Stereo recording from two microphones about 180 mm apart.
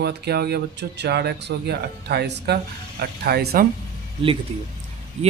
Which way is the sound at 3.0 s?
60° right (ahead or behind).